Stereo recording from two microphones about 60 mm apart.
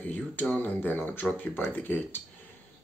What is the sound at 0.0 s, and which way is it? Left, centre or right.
Speech, left.